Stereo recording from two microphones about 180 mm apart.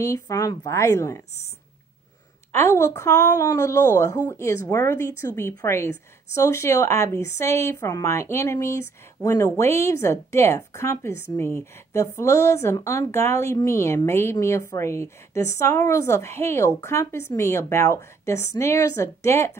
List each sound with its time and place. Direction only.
0.0 s speech: 20° left (ahead or behind)
2.5 s speech: 15° left (ahead or behind)